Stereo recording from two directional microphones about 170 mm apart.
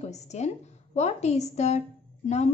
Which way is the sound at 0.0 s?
40° left (ahead or behind).